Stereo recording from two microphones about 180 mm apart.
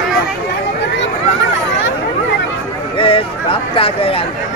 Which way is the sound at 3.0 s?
30° left (ahead or behind).